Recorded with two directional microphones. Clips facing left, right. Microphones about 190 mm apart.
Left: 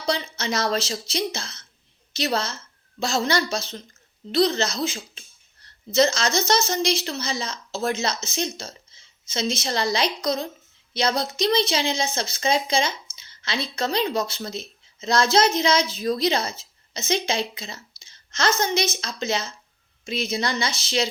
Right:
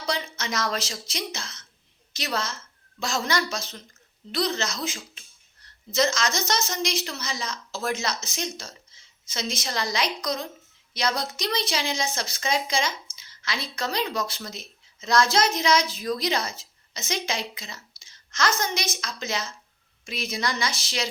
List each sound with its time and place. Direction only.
0.0 s a woman's voice: 30° left (ahead or behind)